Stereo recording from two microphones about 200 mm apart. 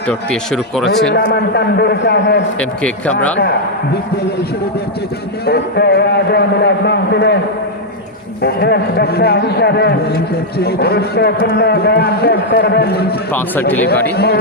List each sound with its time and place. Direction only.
0.1 s speech: 5° left (ahead or behind)
1.1 s a man's voice: 55° left (ahead or behind)
2.6 s speech: 5° left (ahead or behind)
5.5 s a man's voice: 55° left (ahead or behind)
8.4 s a man's voice: 55° left (ahead or behind)
13.3 s speech: 10° left (ahead or behind)